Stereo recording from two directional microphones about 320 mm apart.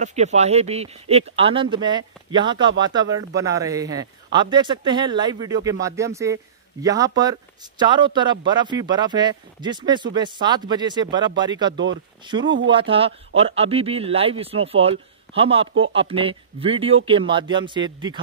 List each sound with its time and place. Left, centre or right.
0.0 s speech: right
11.7 s speech: right
12.3 s speech: centre